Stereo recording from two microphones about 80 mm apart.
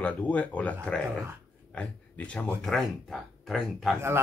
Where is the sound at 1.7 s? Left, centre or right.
Centre.